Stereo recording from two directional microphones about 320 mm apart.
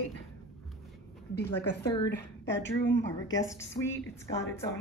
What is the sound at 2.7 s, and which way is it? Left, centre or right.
Speech, left.